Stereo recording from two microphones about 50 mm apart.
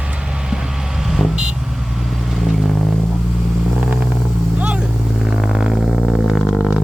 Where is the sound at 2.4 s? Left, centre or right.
Centre.